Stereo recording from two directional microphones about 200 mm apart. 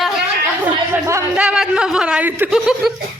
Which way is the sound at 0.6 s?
10° right (ahead or behind).